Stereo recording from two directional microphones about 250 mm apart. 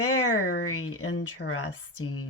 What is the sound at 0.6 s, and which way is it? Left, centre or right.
Speech, left.